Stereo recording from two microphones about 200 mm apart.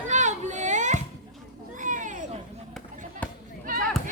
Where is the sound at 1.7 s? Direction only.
40° right (ahead or behind).